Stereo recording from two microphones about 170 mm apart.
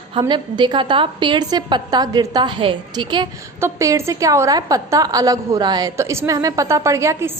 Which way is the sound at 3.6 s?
15° right (ahead or behind).